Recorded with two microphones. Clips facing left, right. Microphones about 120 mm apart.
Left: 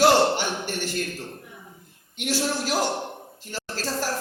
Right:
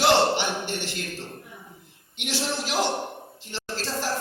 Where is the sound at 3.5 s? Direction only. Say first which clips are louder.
Left 2 dB; 45° left (ahead or behind).